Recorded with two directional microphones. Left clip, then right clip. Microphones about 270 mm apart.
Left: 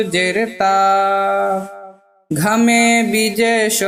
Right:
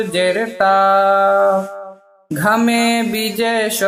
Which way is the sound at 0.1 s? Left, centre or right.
Left.